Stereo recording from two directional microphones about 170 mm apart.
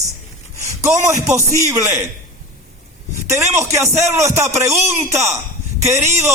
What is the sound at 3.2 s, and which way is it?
Speech, 15° right (ahead or behind).